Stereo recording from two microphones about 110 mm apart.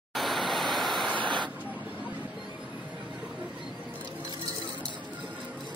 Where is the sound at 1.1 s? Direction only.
45° right (ahead or behind).